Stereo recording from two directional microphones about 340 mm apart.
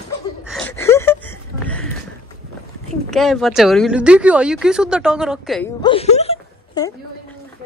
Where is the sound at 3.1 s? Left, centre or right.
Centre.